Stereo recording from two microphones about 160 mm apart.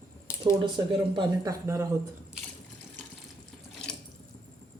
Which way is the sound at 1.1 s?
20° right (ahead or behind).